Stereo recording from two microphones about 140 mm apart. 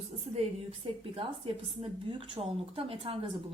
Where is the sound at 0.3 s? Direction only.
45° right (ahead or behind).